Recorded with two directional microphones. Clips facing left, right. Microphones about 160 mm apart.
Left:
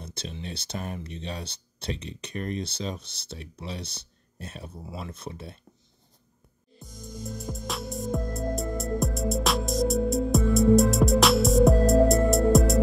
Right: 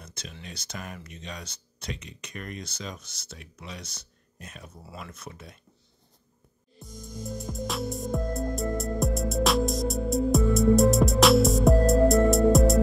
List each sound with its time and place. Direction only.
0.0 s speech: 30° left (ahead or behind)
6.8 s music: centre (ahead or behind)